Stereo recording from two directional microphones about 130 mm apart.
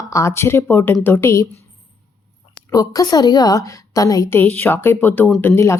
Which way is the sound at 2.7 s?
25° left (ahead or behind).